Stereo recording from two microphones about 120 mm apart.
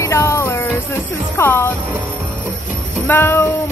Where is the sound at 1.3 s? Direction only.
20° left (ahead or behind).